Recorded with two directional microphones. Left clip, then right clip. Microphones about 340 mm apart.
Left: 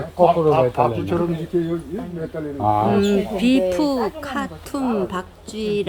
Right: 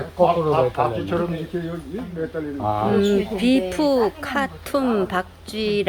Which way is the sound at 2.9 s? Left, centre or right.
Centre.